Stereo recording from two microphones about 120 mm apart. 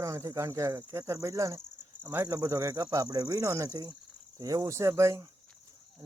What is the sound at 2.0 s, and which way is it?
Speech, 15° right (ahead or behind).